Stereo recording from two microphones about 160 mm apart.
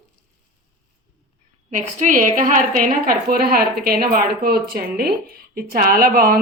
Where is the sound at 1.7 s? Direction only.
55° right (ahead or behind).